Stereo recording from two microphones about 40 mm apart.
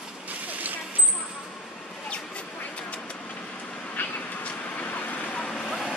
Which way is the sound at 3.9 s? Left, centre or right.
Left.